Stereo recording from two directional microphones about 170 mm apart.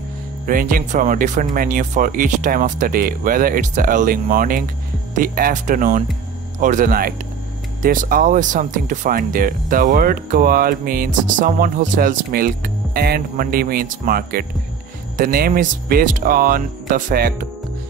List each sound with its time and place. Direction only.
0.5 s speech: 55° right (ahead or behind)